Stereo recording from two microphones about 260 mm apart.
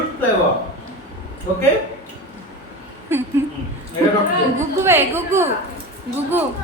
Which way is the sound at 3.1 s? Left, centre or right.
Centre.